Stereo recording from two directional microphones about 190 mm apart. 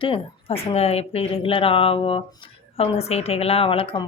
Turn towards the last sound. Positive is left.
turn(degrees=30)  # may be behind; listen again after turning